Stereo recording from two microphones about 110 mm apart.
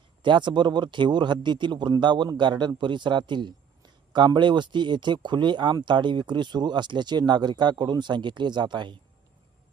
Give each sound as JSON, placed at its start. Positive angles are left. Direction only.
{"t": 0.2, "sound": "speech", "side_deg": -45}